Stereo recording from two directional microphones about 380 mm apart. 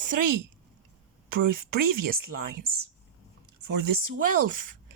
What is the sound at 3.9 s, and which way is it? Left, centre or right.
Speech, right.